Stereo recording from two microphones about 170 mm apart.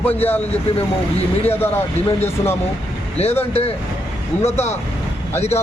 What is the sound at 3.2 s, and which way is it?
Speech, 40° left (ahead or behind).